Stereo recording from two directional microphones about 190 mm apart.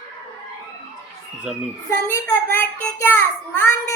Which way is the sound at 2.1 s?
10° left (ahead or behind).